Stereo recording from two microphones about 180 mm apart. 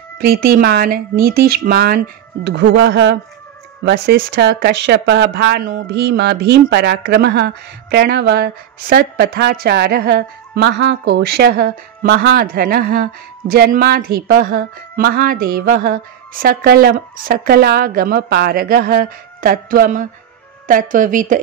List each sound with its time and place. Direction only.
0.2 s speech: 55° right (ahead or behind); by 3.2 s 80° right
3.8 s a woman's voice: 65° right (ahead or behind); by 21.4 s 45° right (ahead or behind)